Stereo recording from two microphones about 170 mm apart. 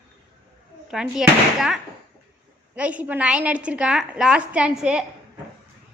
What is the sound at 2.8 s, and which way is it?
A woman's voice, 10° right (ahead or behind).